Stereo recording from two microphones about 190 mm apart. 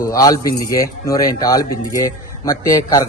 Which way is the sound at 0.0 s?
20° left (ahead or behind).